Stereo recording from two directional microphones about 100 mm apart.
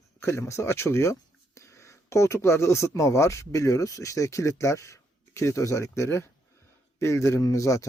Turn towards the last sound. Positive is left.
turn(degrees=35)  # may be behind; listen again after turning